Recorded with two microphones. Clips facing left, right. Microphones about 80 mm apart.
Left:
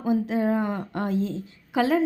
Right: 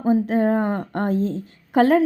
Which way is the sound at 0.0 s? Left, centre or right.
Right.